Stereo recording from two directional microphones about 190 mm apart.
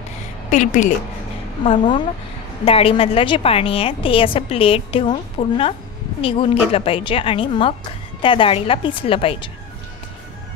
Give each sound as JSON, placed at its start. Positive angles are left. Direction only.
{"t": 0.5, "sound": "a woman's voice", "side_deg": 40}
{"t": 1.6, "sound": "a woman's voice", "side_deg": 25}